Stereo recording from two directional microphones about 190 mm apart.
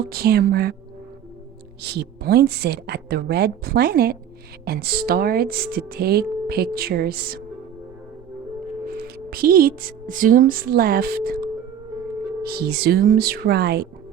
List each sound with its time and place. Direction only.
0.1 s a woman's voice: 55° right (ahead or behind)
1.8 s a woman's voice: 60° right (ahead or behind)
9.1 s a woman's voice: 50° right (ahead or behind)